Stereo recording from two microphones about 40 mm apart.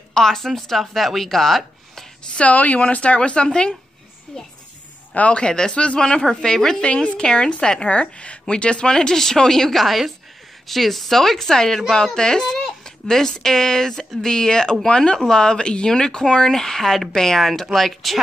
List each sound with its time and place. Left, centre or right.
0.1 s speech: centre
2.3 s a woman's voice: left; by 4.5 s centre
5.1 s speech: left
5.4 s a woman's voice: left
6.8 s a woman's voice: left
9.1 s a woman's voice: centre